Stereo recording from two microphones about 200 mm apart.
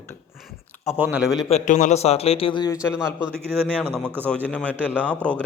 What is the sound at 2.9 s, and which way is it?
A man's voice, 5° right (ahead or behind).